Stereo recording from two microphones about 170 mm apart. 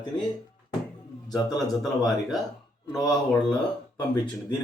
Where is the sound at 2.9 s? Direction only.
20° left (ahead or behind).